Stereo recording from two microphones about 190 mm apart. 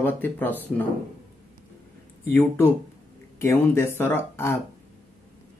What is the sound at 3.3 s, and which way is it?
Speech, 10° left (ahead or behind).